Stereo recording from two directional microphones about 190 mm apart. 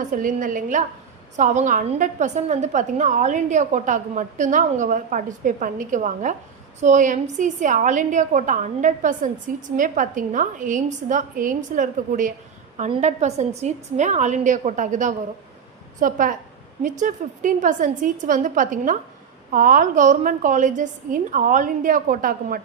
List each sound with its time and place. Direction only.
0.1 s a woman's voice: 45° right (ahead or behind)